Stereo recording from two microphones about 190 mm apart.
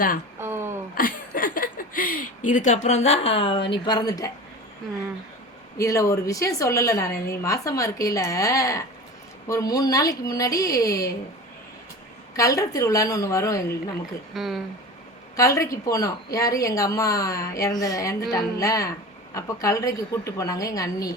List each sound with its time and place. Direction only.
0.3 s a sound: 10° right (ahead or behind)
0.9 s speech: 50° left (ahead or behind); by 4.3 s 20° left (ahead or behind)
5.7 s a woman's voice: 15° left (ahead or behind)
12.4 s a woman's voice: 20° left (ahead or behind)
14.3 s speech: centre (ahead or behind)
15.4 s a woman's voice: 15° left (ahead or behind)